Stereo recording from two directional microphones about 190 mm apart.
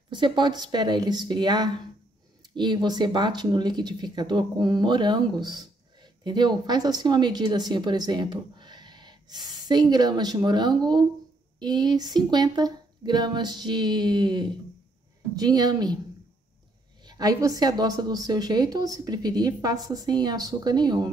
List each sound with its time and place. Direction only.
0.1 s speech: 25° right (ahead or behind)
17.0 s speech: 20° right (ahead or behind)